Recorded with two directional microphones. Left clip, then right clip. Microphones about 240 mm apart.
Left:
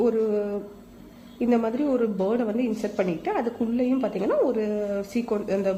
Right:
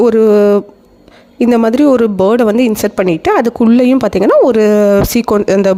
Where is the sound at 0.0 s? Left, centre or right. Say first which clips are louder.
Right 16 dB; right.